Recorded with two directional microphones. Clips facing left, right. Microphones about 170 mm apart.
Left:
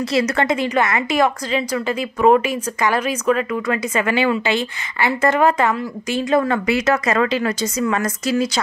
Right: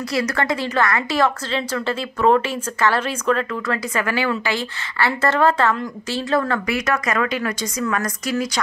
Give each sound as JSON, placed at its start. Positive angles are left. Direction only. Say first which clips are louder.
{"t": 0.1, "sound": "a woman's voice", "louder": "left 2 dB", "side_deg": 20}